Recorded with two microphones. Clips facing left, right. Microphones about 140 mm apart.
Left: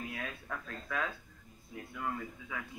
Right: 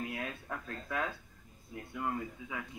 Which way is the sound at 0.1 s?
20° right (ahead or behind).